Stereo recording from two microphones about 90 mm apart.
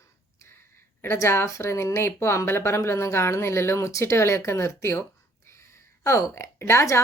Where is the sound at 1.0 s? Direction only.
30° left (ahead or behind).